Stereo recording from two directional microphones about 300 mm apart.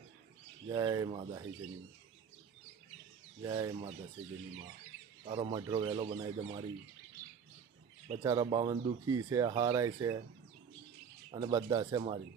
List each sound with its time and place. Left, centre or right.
0.7 s speech: centre
3.4 s speech: centre
5.2 s speech: centre
7.2 s bird: centre
8.2 s speech: centre
11.3 s speech: centre